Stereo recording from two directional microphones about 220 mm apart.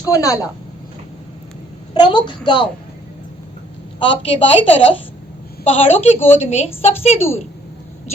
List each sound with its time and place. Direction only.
0.1 s a woman's voice: 15° left (ahead or behind)
1.9 s a woman's voice: 20° left (ahead or behind)
4.0 s a woman's voice: 25° left (ahead or behind)
6.1 s a woman's voice: 10° left (ahead or behind)
6.5 s a woman's voice: 30° left (ahead or behind)